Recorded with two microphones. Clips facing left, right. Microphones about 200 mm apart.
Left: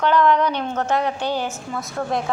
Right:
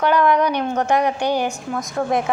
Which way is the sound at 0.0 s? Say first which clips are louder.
Right 1 dB; 10° right (ahead or behind).